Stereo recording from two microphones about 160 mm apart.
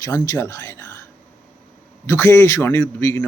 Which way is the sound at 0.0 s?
20° left (ahead or behind).